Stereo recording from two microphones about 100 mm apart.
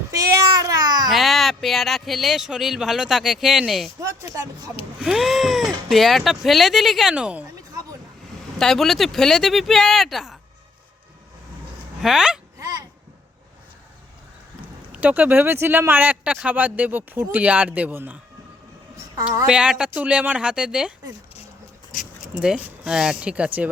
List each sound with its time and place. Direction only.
0.1 s a sound: 35° right (ahead or behind)
1.1 s speech: centre (ahead or behind)
4.0 s speech: 30° right (ahead or behind)
4.9 s speech: 5° right (ahead or behind)
8.5 s speech: 5° left (ahead or behind)
12.0 s speech: 5° right (ahead or behind)
12.5 s a sound: 35° right (ahead or behind)
14.9 s speech: 15° right (ahead or behind)
19.5 s speech: 10° right (ahead or behind)
22.2 s speech: 10° right (ahead or behind)